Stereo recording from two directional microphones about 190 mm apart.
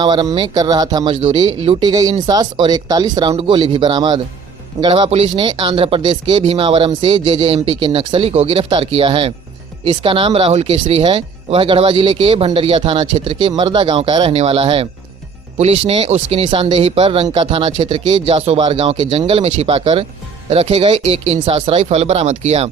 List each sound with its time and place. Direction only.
0.0 s speech: 20° right (ahead or behind)